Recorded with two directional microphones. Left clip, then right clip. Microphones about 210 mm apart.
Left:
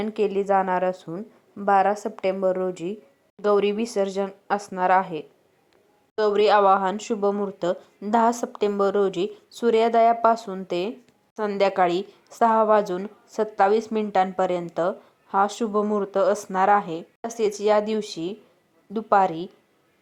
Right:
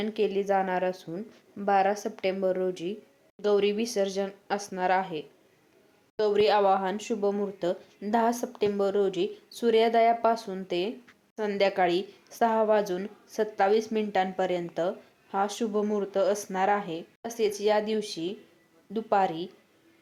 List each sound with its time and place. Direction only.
0.0 s a woman's voice: 15° left (ahead or behind)